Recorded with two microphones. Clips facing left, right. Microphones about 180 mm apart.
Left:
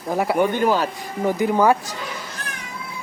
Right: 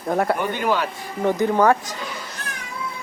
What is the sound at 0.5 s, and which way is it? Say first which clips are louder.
Speech: left 3 dB; 40° left (ahead or behind).